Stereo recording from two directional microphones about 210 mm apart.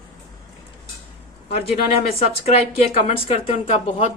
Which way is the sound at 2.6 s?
30° left (ahead or behind).